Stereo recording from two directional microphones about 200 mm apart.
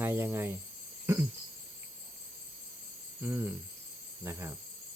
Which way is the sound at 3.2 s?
10° right (ahead or behind).